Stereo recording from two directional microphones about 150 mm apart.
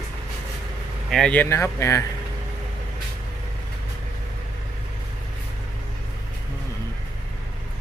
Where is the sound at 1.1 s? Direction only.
5° left (ahead or behind).